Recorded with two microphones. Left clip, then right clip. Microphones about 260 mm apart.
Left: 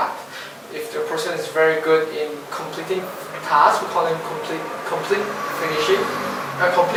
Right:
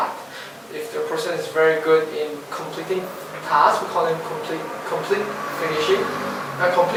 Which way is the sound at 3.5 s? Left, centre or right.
Centre.